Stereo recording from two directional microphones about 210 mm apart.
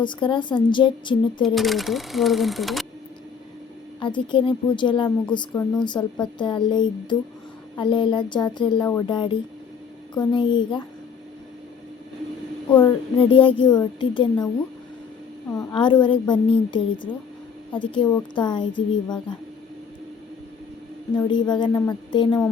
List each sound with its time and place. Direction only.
0.0 s speech: 20° left (ahead or behind)
1.5 s speech: centre (ahead or behind)
4.0 s speech: 25° left (ahead or behind)
12.8 s speech: 25° left (ahead or behind)
15.5 s speech: 25° left (ahead or behind)
21.2 s speech: 20° left (ahead or behind)